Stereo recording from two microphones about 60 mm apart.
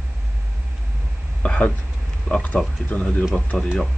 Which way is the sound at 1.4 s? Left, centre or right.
Centre.